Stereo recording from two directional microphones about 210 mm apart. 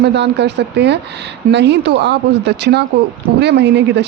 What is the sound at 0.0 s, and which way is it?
Speech, 55° right (ahead or behind).